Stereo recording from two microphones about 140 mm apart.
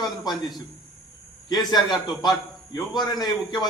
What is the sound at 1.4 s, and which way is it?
A man's voice, 30° left (ahead or behind).